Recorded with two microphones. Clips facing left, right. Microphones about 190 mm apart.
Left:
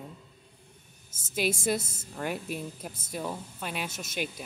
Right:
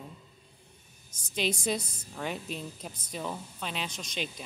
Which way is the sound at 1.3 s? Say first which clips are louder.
Left 2 dB; 10° left (ahead or behind).